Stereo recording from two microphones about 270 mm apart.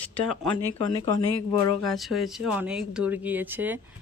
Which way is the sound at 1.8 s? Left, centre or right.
Centre.